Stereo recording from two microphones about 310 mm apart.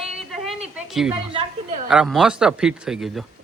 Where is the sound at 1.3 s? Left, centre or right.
Centre.